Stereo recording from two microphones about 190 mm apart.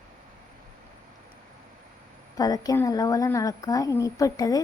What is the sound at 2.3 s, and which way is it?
A woman's voice, 20° left (ahead or behind).